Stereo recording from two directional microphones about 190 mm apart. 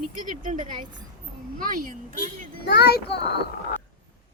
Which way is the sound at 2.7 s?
60° left (ahead or behind).